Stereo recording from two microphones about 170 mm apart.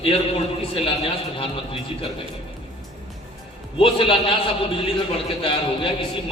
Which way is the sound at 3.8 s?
30° left (ahead or behind).